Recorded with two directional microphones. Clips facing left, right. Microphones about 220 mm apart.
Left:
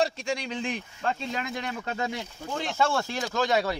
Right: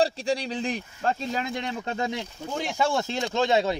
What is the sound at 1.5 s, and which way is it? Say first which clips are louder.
Speech: right 2 dB; 25° right (ahead or behind).